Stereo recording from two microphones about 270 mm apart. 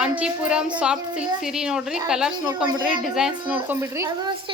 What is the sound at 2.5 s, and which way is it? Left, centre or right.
Speech, centre.